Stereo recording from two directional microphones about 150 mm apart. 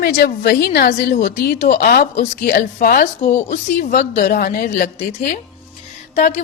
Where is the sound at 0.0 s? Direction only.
90° left; by 1.5 s 75° left (ahead or behind).